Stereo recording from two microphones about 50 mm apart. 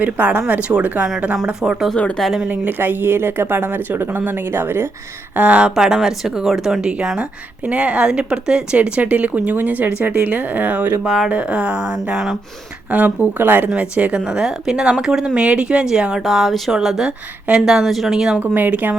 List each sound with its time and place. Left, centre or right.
0.0 s a woman's voice: right
0.7 s speech: right
2.5 s speech: right
5.4 s speech: right
5.7 s a woman's voice: centre
7.7 s a woman's voice: right
11.0 s speech: centre
11.3 s speech: right
12.1 s speech: centre
12.9 s a woman's voice: right
13.7 s a woman's voice: right
16.2 s a woman's voice: centre
18.3 s a woman's voice: right